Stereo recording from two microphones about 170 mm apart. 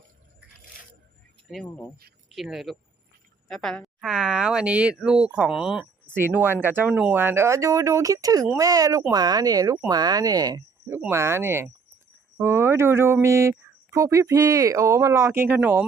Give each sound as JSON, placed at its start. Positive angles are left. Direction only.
{"t": 2.3, "sound": "speech", "side_deg": 0}